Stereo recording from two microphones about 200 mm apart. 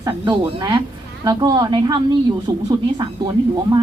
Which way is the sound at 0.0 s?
20° right (ahead or behind).